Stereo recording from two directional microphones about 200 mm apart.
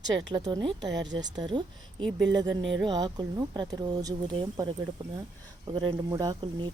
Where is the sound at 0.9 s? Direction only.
60° right (ahead or behind).